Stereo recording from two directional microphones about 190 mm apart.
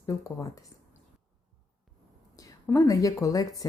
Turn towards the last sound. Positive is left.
turn(degrees=20)  # may be behind; listen again after turning